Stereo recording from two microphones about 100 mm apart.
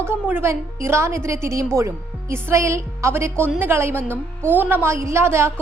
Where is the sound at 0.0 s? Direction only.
20° right (ahead or behind).